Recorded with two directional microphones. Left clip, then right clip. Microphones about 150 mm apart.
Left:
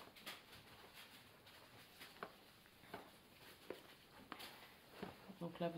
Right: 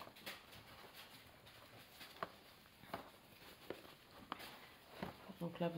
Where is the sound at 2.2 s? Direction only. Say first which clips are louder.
Right 6 dB; 70° right (ahead or behind).